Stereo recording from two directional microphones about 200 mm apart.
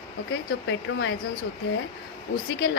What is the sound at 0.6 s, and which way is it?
Speech, 65° left (ahead or behind).